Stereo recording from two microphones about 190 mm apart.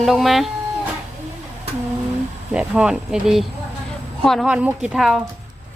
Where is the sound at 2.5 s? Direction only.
5° right (ahead or behind).